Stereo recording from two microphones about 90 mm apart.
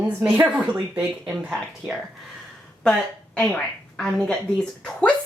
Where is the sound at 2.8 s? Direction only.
10° left (ahead or behind).